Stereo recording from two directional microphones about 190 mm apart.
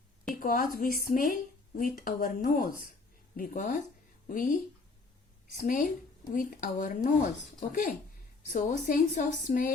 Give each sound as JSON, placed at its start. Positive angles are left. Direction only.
{"t": 0.3, "sound": "a woman's voice", "side_deg": 45}
{"t": 5.6, "sound": "a woman's voice", "side_deg": 45}